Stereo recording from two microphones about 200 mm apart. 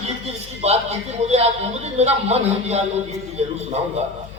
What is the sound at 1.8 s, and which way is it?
A man's voice, 30° right (ahead or behind).